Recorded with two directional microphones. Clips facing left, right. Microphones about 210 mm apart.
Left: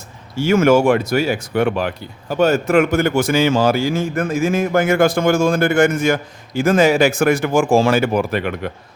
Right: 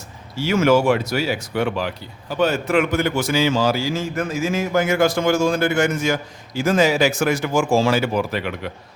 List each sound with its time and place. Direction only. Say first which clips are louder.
0.3 s a man's voice: left 3 dB; 50° left (ahead or behind)